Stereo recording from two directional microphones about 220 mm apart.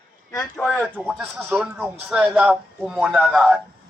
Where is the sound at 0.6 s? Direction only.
5° left (ahead or behind).